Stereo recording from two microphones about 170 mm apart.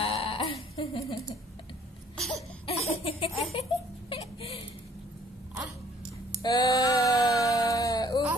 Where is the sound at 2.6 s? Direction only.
35° left (ahead or behind).